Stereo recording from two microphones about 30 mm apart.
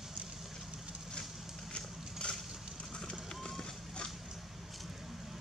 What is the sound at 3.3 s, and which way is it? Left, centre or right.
Run, centre.